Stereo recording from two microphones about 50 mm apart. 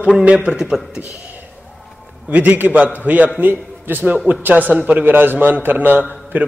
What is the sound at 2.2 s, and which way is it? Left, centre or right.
A man's voice, right.